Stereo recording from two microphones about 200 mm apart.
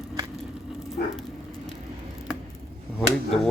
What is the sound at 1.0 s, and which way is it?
Dog, 50° left (ahead or behind).